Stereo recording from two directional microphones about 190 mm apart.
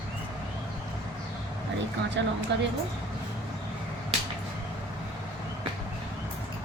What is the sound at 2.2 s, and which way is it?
Speech, 70° right (ahead or behind).